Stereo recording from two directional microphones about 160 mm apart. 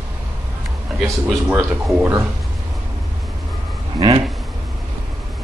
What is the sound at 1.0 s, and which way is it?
A man's voice, 15° right (ahead or behind).